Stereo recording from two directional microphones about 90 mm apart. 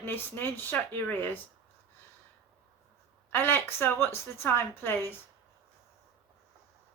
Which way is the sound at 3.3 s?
25° left (ahead or behind).